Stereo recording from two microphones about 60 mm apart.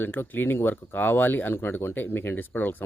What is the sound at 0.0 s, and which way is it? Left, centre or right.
Speech, left.